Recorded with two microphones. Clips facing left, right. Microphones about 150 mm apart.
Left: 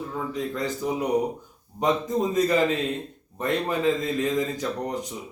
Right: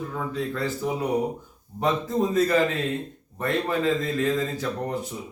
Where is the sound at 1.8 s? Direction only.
15° left (ahead or behind).